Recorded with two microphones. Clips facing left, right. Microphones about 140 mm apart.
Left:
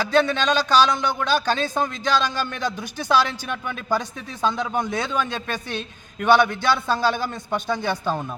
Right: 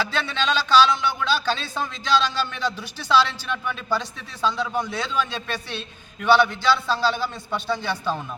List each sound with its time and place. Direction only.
0.0 s a man's voice: 45° left (ahead or behind)
4.5 s a man's voice: 15° left (ahead or behind)
4.9 s a man's voice: 50° left (ahead or behind)